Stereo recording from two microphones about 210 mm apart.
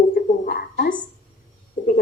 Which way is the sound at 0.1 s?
45° left (ahead or behind).